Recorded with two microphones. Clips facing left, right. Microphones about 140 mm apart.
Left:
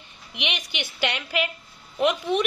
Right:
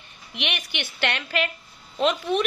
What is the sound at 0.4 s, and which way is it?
A woman's voice, 15° left (ahead or behind).